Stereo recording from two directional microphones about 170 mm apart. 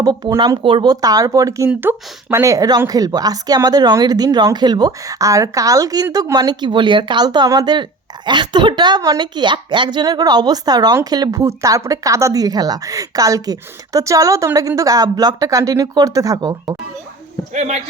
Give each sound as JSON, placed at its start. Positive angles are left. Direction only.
{"t": 0.0, "sound": "a woman's voice", "side_deg": -20}
{"t": 17.5, "sound": "a man's voice", "side_deg": -40}